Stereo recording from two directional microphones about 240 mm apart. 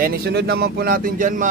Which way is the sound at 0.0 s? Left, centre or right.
Right.